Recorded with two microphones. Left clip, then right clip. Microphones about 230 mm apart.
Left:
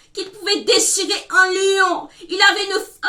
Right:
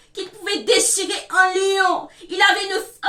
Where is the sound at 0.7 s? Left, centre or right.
Centre.